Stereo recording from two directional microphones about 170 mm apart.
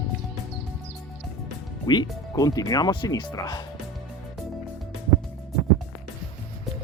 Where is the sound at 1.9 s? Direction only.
25° left (ahead or behind).